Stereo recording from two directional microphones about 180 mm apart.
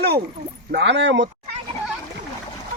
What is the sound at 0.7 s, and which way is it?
Speech, 80° right.